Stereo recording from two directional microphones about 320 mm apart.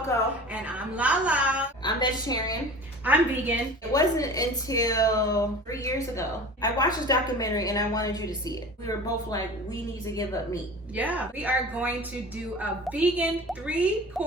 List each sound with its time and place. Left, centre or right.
0.5 s a sound: centre
1.8 s a woman's voice: centre
3.0 s a woman's voice: centre
3.9 s a woman's voice: centre
10.9 s a woman's voice: centre